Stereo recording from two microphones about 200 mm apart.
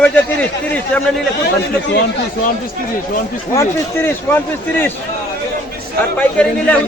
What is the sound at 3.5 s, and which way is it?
Speech, 15° left (ahead or behind).